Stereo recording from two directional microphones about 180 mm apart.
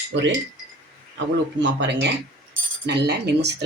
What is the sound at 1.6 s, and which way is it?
Coin, 80° right.